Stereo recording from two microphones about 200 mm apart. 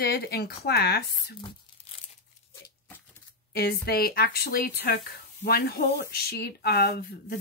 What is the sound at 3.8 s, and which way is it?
Speech, 50° left (ahead or behind).